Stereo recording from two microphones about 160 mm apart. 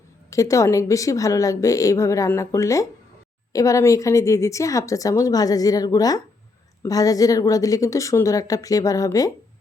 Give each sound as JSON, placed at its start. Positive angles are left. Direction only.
{"t": 0.3, "sound": "speech", "side_deg": 20}